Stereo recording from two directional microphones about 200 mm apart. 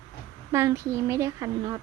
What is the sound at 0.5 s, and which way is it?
A woman's voice, 15° right (ahead or behind).